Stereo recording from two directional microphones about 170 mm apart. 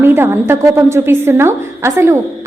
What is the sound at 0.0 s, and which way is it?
A woman's voice, 15° right (ahead or behind).